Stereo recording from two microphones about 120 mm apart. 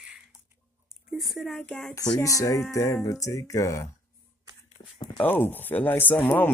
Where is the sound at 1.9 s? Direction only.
30° left (ahead or behind).